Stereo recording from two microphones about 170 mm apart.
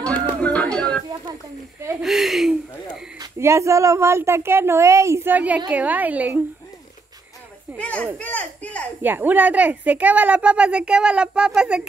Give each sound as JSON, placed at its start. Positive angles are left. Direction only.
{"t": 0.0, "sound": "music", "side_deg": 5}
{"t": 2.0, "sound": "speech", "side_deg": 0}
{"t": 3.2, "sound": "speech", "side_deg": -15}
{"t": 7.7, "sound": "speech", "side_deg": 10}
{"t": 9.0, "sound": "speech", "side_deg": -10}